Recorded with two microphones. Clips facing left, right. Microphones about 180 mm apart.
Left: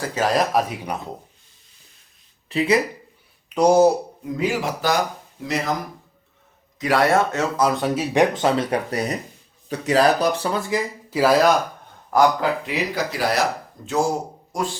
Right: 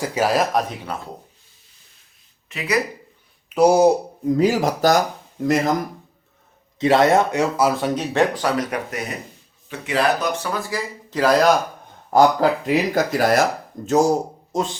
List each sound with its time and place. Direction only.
0.0 s speech: 10° right (ahead or behind)
0.5 s speech: 15° left (ahead or behind)
2.5 s speech: 30° left (ahead or behind)
3.5 s speech: 10° right (ahead or behind)
4.4 s speech: 40° right (ahead or behind)
6.7 s speech: 25° right (ahead or behind); by 8.0 s centre (ahead or behind)
8.1 s speech: 20° left (ahead or behind)
11.1 s speech: 5° left (ahead or behind)
12.1 s speech: 40° right (ahead or behind)
14.5 s speech: 20° right (ahead or behind)